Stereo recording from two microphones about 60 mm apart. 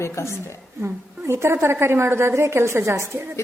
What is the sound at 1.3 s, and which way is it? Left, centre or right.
A woman's voice, right.